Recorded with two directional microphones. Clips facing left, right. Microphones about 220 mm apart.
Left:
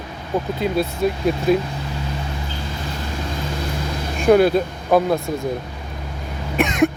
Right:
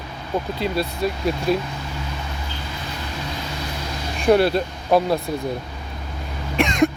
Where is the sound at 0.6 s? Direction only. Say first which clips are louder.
Left 3 dB; 45° left (ahead or behind).